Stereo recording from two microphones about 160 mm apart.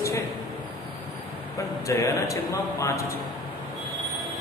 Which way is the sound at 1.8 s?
20° left (ahead or behind).